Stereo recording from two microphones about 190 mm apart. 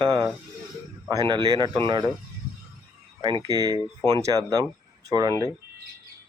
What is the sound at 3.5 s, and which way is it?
Speech, 20° right (ahead or behind).